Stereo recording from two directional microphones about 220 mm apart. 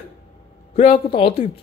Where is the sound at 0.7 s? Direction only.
25° left (ahead or behind).